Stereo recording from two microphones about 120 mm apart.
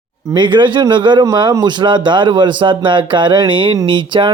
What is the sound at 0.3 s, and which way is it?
Speech, 40° right (ahead or behind).